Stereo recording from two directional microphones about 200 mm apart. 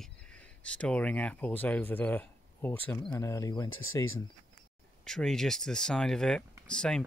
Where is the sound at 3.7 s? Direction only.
90° left.